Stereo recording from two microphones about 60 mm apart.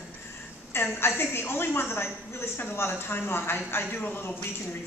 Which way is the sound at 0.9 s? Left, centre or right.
Left.